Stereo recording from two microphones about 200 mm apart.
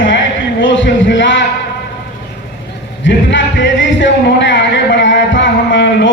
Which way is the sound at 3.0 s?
65° left (ahead or behind).